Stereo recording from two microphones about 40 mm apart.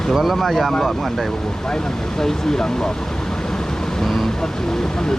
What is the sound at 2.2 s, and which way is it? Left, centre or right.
Speech, centre.